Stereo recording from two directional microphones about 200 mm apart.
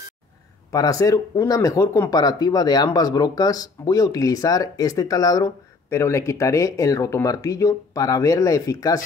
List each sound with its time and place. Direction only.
0.7 s speech: 15° left (ahead or behind)